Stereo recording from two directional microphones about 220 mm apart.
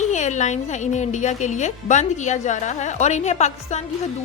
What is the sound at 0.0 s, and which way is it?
Speech, 30° left (ahead or behind).